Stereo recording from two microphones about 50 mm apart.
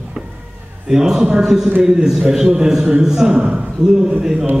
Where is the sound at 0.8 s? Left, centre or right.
Centre.